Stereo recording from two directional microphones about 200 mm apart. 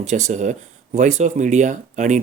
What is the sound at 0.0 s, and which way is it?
Speech, 35° right (ahead or behind).